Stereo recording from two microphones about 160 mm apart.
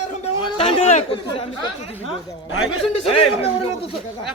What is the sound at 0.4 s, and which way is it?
Chatter, 35° left (ahead or behind).